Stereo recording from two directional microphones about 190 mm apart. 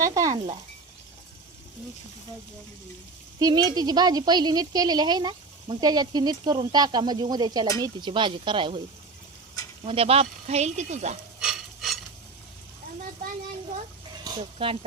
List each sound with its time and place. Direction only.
0.0 s speech: 20° right (ahead or behind)
3.3 s speech: 20° right (ahead or behind)
9.8 s speech: 30° right (ahead or behind)
11.3 s stir: 5° right (ahead or behind)
14.3 s speech: 25° right (ahead or behind)